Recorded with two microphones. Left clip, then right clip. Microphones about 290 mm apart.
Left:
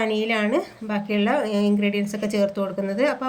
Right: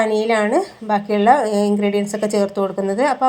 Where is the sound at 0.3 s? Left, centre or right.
Centre.